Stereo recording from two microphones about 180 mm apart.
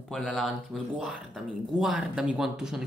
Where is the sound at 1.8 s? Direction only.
5° right (ahead or behind).